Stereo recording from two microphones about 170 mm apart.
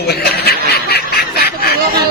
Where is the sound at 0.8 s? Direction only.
65° left (ahead or behind).